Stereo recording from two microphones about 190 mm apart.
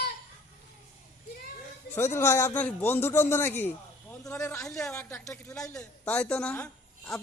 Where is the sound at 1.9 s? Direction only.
15° left (ahead or behind).